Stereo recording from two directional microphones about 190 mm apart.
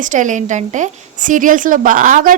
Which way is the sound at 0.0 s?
40° right (ahead or behind).